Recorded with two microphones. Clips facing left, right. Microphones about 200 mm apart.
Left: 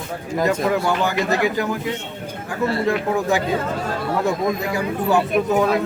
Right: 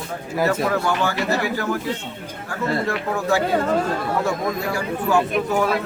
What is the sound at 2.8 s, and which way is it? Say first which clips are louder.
A man's voice: left 3 dB; 15° left (ahead or behind).